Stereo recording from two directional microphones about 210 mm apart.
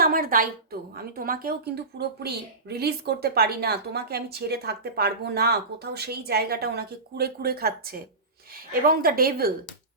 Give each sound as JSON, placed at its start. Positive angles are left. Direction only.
{"t": 0.0, "sound": "a woman's voice", "side_deg": -45}